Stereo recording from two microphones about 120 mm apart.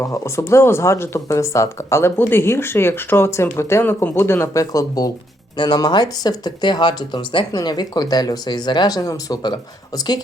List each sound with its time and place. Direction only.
0.0 s speech: 25° left (ahead or behind)